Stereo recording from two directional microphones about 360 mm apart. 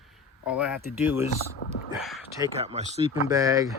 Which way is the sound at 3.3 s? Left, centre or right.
Centre.